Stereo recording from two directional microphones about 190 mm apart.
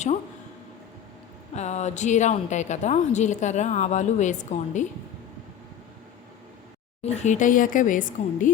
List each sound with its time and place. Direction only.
1.5 s a woman's voice: 35° left (ahead or behind)
7.0 s a woman's voice: 35° left (ahead or behind)